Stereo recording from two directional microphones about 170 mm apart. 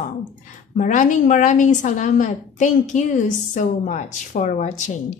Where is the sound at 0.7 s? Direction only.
50° left (ahead or behind).